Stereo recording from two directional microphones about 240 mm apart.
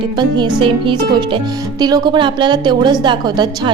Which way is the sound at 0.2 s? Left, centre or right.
Centre.